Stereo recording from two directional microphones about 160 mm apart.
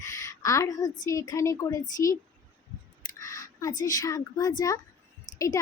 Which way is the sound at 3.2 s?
25° left (ahead or behind).